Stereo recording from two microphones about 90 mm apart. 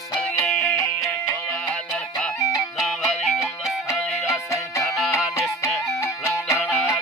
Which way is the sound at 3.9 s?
35° left (ahead or behind).